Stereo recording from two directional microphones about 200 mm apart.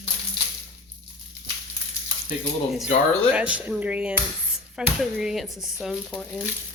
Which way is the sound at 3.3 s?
5° right (ahead or behind).